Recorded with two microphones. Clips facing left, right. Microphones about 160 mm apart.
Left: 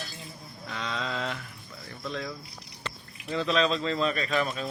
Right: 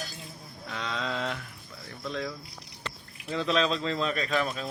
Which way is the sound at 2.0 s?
Centre (ahead or behind).